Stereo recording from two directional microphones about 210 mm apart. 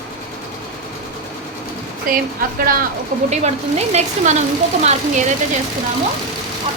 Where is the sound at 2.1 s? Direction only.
45° right (ahead or behind).